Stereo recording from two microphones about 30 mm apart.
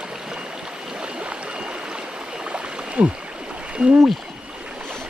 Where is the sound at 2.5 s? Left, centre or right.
Right.